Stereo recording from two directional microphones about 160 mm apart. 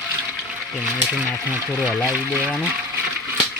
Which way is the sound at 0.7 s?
Centre (ahead or behind).